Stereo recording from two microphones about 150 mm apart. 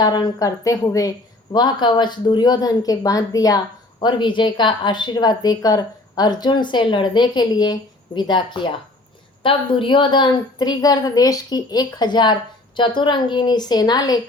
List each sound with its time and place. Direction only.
0.0 s a woman's voice: 30° left (ahead or behind)